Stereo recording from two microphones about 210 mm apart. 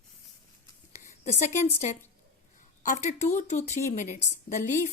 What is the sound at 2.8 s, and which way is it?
A woman's voice, 35° left (ahead or behind).